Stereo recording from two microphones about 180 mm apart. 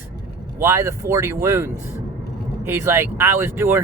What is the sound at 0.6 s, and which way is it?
Speech, 15° right (ahead or behind).